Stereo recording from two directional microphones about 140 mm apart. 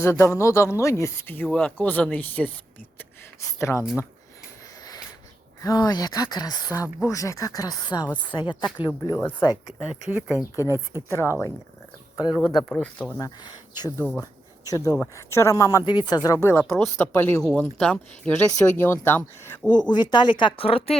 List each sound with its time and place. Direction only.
0.0 s speech: 20° left (ahead or behind)
1.5 s speech: 5° left (ahead or behind)
3.6 s speech: 20° left (ahead or behind)
5.6 s speech: 30° left (ahead or behind)
9.1 s speech: 15° left (ahead or behind)
9.6 s speech: 5° right (ahead or behind)
11.1 s speech: 20° left (ahead or behind)
12.3 s speech: centre (ahead or behind)
13.1 s speech: 30° left (ahead or behind)
14.2 s a sound: 25° left (ahead or behind)
14.8 s speech: 20° left (ahead or behind)
17.4 s speech: 5° left (ahead or behind)
19.9 s speech: 30° left (ahead or behind)